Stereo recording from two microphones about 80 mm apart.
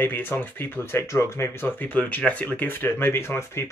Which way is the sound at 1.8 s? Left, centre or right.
Left.